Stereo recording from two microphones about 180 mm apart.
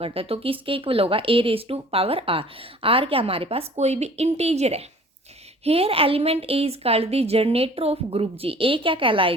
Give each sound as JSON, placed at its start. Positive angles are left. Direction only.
{"t": 0.0, "sound": "speech", "side_deg": -30}